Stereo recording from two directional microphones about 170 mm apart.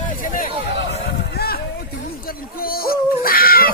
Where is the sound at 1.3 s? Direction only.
65° left (ahead or behind).